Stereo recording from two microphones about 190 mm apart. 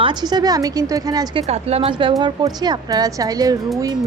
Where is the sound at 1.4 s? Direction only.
35° right (ahead or behind).